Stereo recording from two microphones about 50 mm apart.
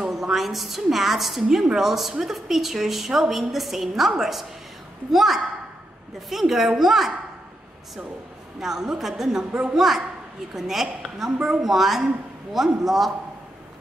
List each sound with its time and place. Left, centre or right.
0.0 s a woman's voice: centre
8.5 s a woman's voice: centre
9.5 s a woman's voice: centre
9.8 s a woman's voice: centre